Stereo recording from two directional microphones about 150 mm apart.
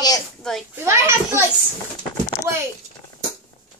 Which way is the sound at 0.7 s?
20° right (ahead or behind).